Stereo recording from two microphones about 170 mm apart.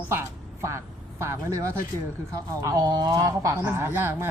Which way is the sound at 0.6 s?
15° right (ahead or behind).